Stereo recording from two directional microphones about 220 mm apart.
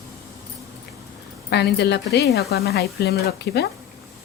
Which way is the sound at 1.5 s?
50° left (ahead or behind).